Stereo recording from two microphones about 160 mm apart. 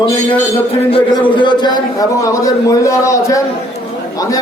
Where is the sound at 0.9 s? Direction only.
35° left (ahead or behind).